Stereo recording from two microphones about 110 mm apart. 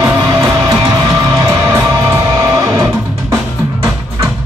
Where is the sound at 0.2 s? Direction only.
35° right (ahead or behind).